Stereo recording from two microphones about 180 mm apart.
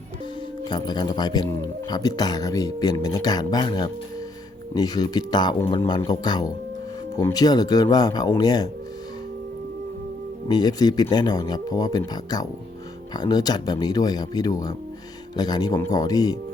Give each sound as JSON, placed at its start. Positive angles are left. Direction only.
{"t": 0.6, "sound": "speech", "side_deg": 25}
{"t": 10.5, "sound": "speech", "side_deg": 20}